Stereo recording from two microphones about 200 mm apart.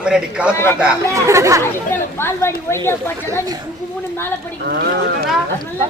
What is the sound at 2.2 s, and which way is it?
Speech, 10° left (ahead or behind).